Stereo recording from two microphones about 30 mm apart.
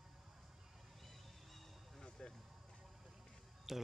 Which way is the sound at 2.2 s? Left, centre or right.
Left.